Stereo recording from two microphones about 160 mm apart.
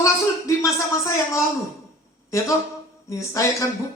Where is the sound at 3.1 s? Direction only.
20° left (ahead or behind).